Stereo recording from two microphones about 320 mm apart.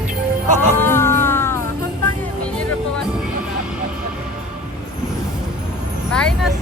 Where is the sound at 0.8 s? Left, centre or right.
Centre.